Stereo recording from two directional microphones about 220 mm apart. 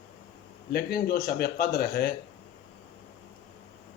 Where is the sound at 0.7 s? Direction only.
45° left (ahead or behind).